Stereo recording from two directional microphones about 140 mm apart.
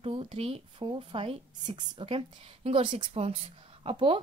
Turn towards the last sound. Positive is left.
turn(degrees=-40)  # may be behind; listen again after turning